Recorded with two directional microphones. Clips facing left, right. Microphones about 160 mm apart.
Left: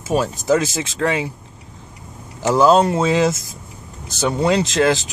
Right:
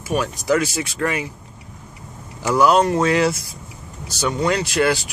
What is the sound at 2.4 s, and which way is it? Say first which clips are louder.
Speech: left 2 dB; 25° left (ahead or behind).